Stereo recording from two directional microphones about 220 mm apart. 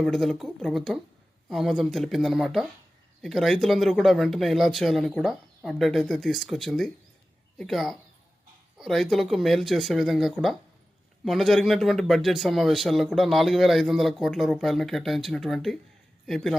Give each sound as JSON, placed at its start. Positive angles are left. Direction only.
{"t": 0.0, "sound": "speech", "side_deg": 0}